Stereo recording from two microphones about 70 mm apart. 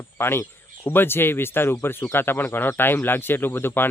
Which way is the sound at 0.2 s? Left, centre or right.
Left.